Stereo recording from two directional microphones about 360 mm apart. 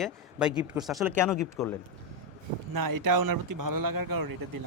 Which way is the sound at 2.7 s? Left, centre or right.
Right.